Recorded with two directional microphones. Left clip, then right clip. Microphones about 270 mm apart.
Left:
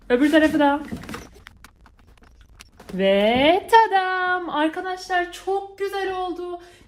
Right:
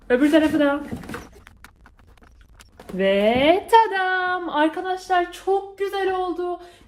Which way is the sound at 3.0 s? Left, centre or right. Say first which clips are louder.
Left 1 dB; left.